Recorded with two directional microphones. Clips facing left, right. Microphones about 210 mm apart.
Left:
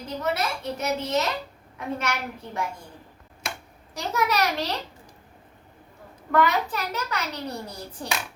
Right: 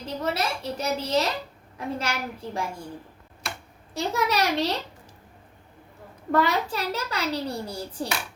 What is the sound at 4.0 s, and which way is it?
Speech, 30° right (ahead or behind).